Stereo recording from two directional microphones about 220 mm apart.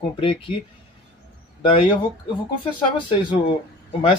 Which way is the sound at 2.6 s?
20° left (ahead or behind).